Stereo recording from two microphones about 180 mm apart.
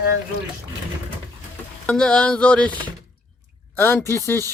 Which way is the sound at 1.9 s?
5° left (ahead or behind).